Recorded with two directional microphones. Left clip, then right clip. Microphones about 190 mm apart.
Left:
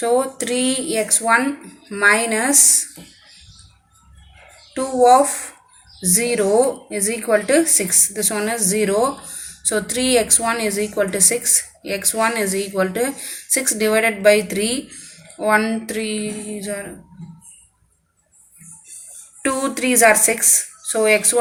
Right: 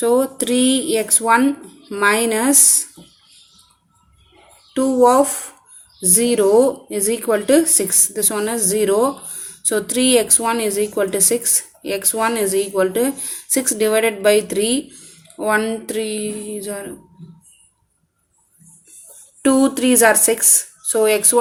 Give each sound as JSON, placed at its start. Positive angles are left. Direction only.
{"t": 0.0, "sound": "a woman's voice", "side_deg": -45}
{"t": 4.8, "sound": "a woman's voice", "side_deg": -45}
{"t": 19.4, "sound": "a woman's voice", "side_deg": -45}